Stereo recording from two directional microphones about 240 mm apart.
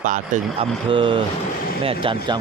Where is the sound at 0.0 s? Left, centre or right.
Right.